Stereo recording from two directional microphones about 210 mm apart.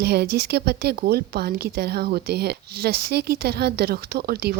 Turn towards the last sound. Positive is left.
turn(degrees=-50)  # may be behind; listen again after turning